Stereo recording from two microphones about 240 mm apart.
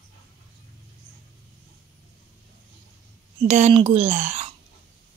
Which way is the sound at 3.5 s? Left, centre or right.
Right.